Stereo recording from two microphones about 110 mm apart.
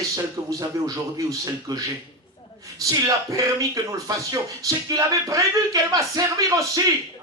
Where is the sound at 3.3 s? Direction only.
30° right (ahead or behind).